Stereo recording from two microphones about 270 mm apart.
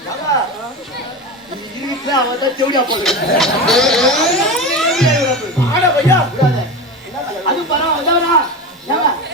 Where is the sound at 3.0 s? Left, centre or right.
Centre.